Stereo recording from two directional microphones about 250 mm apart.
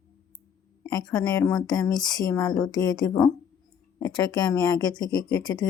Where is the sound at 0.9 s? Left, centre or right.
Centre.